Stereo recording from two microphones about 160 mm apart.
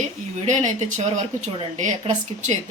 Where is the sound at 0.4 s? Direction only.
50° right (ahead or behind).